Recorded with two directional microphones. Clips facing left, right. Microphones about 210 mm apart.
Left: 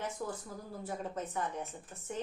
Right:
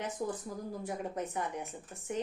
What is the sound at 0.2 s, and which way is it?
A woman's voice, 20° right (ahead or behind).